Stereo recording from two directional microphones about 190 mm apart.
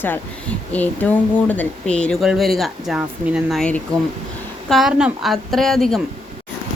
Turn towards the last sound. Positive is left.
turn(degrees=0)  # may be behind; listen again after turning